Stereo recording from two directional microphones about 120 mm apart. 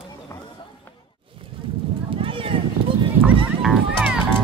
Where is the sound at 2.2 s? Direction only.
50° right (ahead or behind).